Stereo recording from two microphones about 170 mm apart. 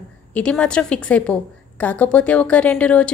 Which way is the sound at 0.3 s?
5° left (ahead or behind).